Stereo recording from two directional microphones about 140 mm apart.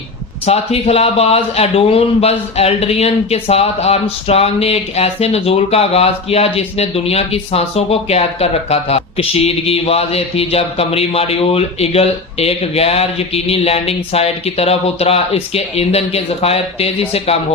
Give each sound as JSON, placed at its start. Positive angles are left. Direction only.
{"t": 0.4, "sound": "speech", "side_deg": 45}